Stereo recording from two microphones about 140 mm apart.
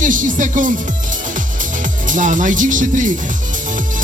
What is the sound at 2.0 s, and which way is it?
Speech, 65° right (ahead or behind).